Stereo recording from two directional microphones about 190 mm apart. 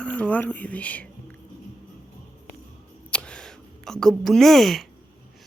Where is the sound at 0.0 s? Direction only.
5° left (ahead or behind).